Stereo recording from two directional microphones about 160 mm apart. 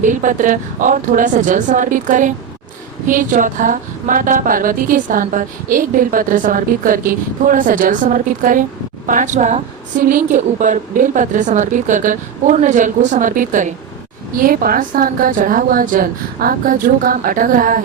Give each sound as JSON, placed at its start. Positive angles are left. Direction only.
{"t": 0.0, "sound": "a woman's voice", "side_deg": -55}